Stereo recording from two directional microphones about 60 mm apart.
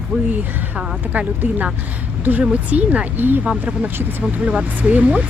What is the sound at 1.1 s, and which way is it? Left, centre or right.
Speech, right.